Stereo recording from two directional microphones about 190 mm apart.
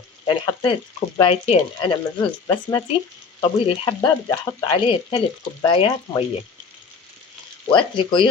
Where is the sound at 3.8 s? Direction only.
20° left (ahead or behind).